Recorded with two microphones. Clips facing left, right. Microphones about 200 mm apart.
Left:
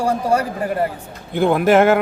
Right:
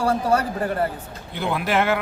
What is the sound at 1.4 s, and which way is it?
Speech, 50° left (ahead or behind).